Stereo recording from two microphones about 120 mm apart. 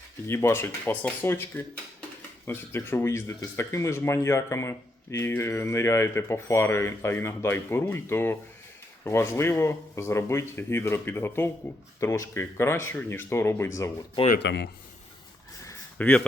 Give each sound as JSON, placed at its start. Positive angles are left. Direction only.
{"t": 0.3, "sound": "speech", "side_deg": 20}
{"t": 16.0, "sound": "speech", "side_deg": 10}